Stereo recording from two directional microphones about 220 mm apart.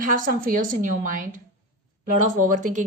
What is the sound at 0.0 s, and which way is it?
A woman's voice, 40° right (ahead or behind).